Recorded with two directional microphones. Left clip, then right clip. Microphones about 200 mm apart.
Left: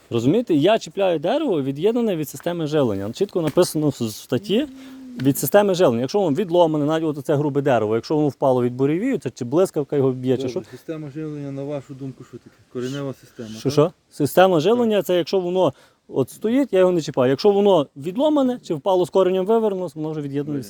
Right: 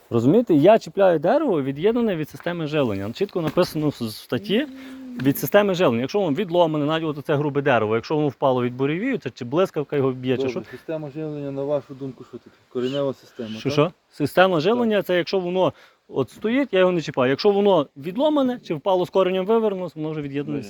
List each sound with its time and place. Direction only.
0.1 s speech: 10° left (ahead or behind)
1.4 s speech: 35° left (ahead or behind)
11.4 s speech: 35° left (ahead or behind)
12.7 s speech: 55° left (ahead or behind)